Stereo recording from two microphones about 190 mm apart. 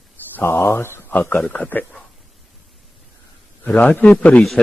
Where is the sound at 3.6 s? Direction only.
10° left (ahead or behind).